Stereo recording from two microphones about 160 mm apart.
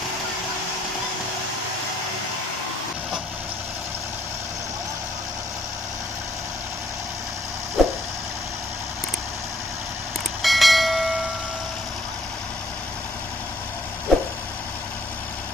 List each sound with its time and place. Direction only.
7.8 s a sound: centre (ahead or behind)
10.4 s train: centre (ahead or behind)
14.1 s vehicle: centre (ahead or behind)